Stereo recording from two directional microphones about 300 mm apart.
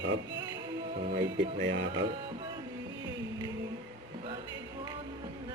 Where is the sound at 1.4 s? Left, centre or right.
Right.